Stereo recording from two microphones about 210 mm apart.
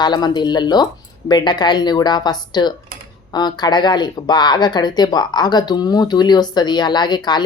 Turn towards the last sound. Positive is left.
turn(degrees=20)  # may be behind; listen again after turning